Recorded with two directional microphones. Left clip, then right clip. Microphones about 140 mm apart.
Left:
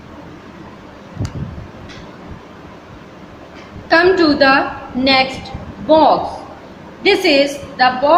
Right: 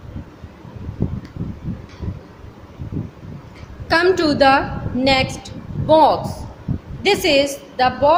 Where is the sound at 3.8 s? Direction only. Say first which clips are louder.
Left 4 dB; 70° right (ahead or behind).